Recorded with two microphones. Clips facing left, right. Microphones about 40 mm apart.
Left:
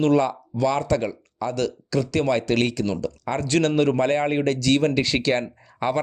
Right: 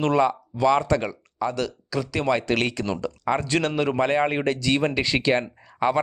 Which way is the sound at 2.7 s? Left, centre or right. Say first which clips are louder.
Left 2 dB; right.